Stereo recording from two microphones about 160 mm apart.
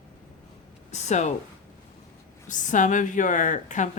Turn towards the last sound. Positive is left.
turn(degrees=50)  # may be behind; listen again after turning